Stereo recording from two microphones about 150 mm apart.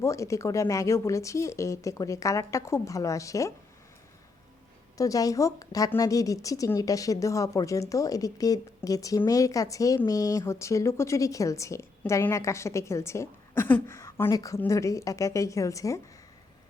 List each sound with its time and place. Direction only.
0.0 s speech: 20° left (ahead or behind)
4.9 s speech: 25° left (ahead or behind)